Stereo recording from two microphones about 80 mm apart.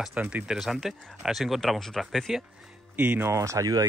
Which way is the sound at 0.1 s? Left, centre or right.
Centre.